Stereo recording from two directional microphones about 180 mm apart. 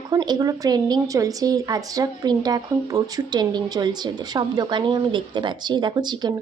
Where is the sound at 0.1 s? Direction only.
20° right (ahead or behind).